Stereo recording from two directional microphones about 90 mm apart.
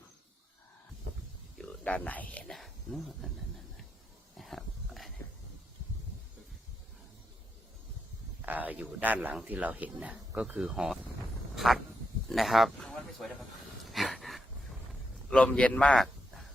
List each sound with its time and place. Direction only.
1.8 s speech: 15° left (ahead or behind)
2.6 s speech: centre (ahead or behind)
4.4 s dog: centre (ahead or behind)
8.4 s speech: 20° right (ahead or behind)
11.5 s a sound: centre (ahead or behind)
12.3 s speech: centre (ahead or behind)
13.8 s gasp: centre (ahead or behind)
15.3 s a man's voice: 10° left (ahead or behind)